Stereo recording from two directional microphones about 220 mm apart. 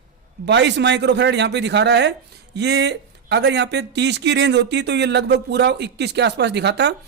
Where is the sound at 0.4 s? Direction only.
50° right (ahead or behind).